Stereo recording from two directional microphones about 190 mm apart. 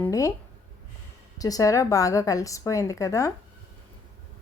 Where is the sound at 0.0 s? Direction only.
15° left (ahead or behind).